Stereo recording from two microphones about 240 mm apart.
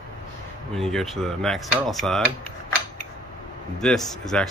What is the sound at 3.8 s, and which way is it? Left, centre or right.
Speech, centre.